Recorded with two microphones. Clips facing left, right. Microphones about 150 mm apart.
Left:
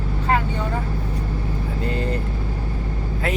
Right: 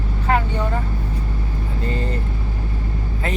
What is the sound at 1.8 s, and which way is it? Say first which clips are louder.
Speech: left 1 dB; centre (ahead or behind).